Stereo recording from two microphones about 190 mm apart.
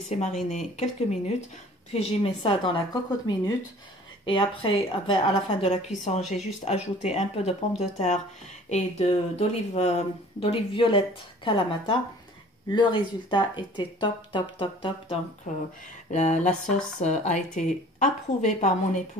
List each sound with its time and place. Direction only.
0.1 s speech: 35° left (ahead or behind)
5.7 s speech: 35° left (ahead or behind)
8.6 s speech: 35° left (ahead or behind)
16.1 s speech: 35° left (ahead or behind)